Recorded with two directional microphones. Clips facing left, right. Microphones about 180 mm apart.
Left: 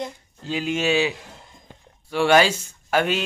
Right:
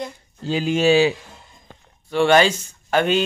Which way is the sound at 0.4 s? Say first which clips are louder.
Right 5 dB; 35° right (ahead or behind).